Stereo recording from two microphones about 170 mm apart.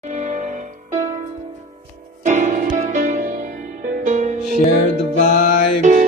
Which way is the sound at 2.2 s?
45° right (ahead or behind).